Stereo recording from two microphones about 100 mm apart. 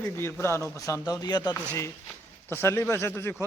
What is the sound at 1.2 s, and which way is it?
Speech, 45° left (ahead or behind).